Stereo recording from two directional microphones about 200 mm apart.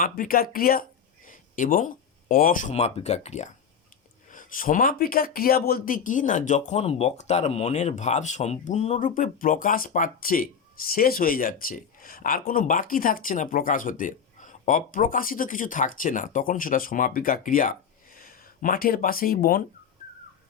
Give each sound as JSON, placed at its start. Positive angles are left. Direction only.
{"t": 0.0, "sound": "speech", "side_deg": 45}